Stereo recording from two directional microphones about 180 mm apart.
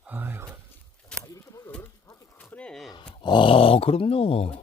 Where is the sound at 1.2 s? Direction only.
15° left (ahead or behind).